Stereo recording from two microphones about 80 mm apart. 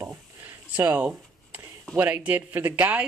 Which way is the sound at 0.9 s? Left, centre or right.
Right.